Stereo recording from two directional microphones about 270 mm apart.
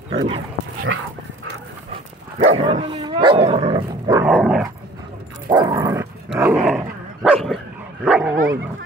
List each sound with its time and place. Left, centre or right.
0.1 s speech: centre
1.9 s dog: centre
4.3 s dog: centre
5.5 s dog: centre